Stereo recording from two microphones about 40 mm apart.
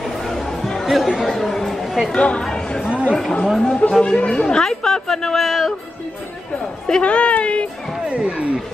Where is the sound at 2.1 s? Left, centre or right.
Left.